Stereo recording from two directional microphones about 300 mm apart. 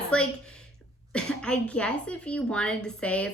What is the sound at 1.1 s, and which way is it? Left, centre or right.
A woman's voice, centre.